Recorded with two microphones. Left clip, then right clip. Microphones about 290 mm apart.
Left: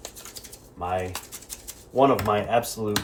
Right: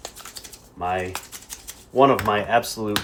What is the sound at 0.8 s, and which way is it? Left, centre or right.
Speech, right.